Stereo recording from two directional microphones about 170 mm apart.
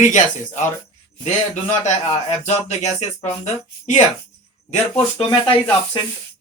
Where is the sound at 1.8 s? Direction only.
45° left (ahead or behind).